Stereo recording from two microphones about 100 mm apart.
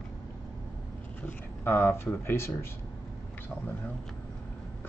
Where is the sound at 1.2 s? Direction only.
25° left (ahead or behind).